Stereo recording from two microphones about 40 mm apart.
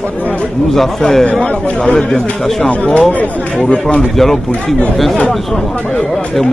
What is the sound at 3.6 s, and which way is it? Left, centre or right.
Speech, left.